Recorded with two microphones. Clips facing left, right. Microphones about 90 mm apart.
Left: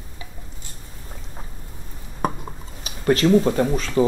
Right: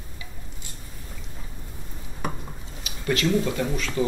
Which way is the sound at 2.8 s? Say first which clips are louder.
Left 7 dB; 35° left (ahead or behind).